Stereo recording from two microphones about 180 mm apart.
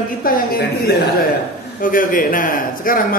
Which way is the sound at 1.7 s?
50° left (ahead or behind).